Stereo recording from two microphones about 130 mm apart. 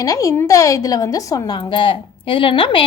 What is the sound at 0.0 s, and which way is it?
A woman's voice, 25° left (ahead or behind).